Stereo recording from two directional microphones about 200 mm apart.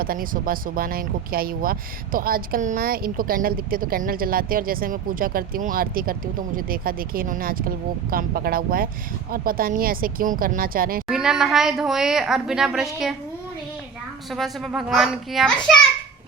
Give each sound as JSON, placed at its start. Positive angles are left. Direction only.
{"t": 0.0, "sound": "speech", "side_deg": -45}
{"t": 11.1, "sound": "a woman's voice", "side_deg": -5}
{"t": 14.3, "sound": "a woman's voice", "side_deg": 0}